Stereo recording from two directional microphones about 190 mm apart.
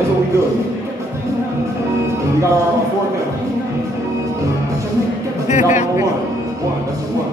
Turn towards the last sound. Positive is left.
turn(degrees=40)  # may be behind; listen again after turning